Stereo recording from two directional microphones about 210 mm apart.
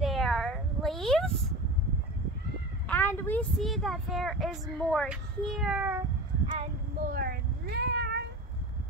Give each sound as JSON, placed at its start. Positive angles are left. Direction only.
{"t": 0.0, "sound": "a sound", "side_deg": 0}
{"t": 2.9, "sound": "speech", "side_deg": 10}
{"t": 6.4, "sound": "child singing", "side_deg": -25}
{"t": 7.1, "sound": "cat", "side_deg": -45}